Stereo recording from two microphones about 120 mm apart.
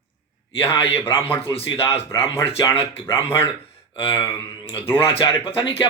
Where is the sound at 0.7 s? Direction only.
50° left (ahead or behind).